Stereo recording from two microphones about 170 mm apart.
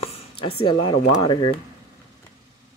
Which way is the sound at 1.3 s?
30° left (ahead or behind).